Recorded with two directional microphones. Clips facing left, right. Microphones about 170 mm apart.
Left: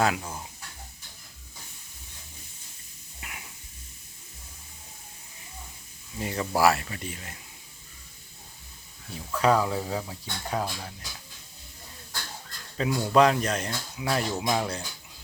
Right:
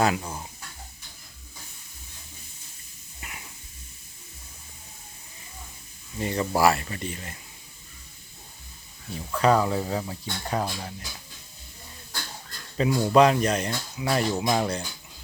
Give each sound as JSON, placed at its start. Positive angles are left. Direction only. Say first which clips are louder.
{"t": 0.0, "sound": "speech", "louder": "right 2 dB", "side_deg": 0}
{"t": 3.2, "sound": "a sound", "louder": "right 1 dB", "side_deg": 5}
{"t": 6.1, "sound": "speech", "louder": "right 2 dB", "side_deg": 5}
{"t": 9.1, "sound": "speech", "louder": "right 2 dB", "side_deg": 5}
{"t": 12.7, "sound": "speech", "louder": "right 3 dB", "side_deg": 0}